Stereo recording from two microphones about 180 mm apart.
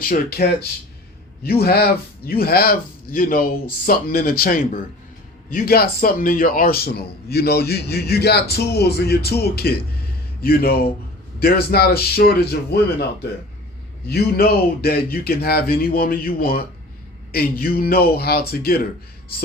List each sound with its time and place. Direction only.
0.1 s a man's voice: 55° left (ahead or behind)
1.5 s a man's voice: 60° left (ahead or behind)
14.1 s a man's voice: 60° left (ahead or behind)